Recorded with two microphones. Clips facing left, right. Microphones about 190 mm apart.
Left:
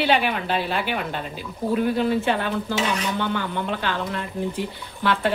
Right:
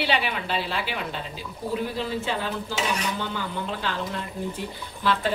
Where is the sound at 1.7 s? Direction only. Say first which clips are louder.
Left 7 dB; 60° left (ahead or behind).